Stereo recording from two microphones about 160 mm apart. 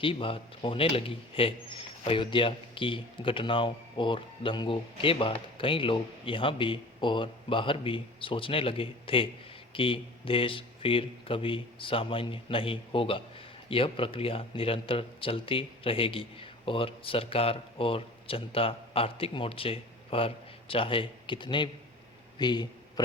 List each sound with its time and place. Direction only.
0.0 s speech: 35° left (ahead or behind)